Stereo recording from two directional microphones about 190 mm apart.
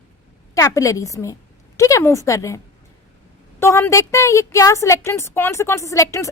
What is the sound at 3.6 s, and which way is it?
Speech, 15° left (ahead or behind).